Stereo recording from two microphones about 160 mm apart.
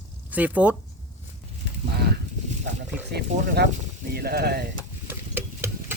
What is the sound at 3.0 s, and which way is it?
Speech, 90° right.